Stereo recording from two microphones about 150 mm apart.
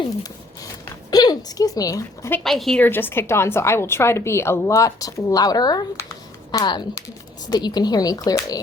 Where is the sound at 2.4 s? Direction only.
Centre (ahead or behind).